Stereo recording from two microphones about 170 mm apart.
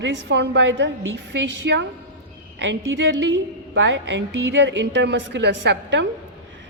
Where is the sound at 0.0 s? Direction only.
90° right.